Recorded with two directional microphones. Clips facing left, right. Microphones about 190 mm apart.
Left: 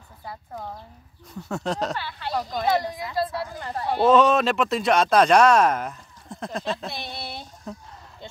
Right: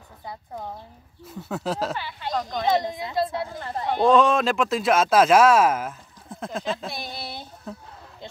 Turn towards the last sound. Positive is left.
turn(degrees=-5)  # may be behind; listen again after turning